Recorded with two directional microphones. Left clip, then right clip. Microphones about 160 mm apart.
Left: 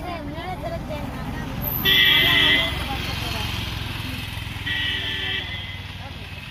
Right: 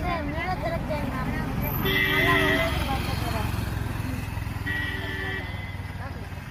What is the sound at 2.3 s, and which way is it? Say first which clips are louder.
Vehicle: left 5 dB; 35° right (ahead or behind).